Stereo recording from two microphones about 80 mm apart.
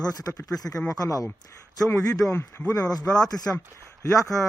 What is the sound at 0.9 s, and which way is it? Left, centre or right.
Speech, left.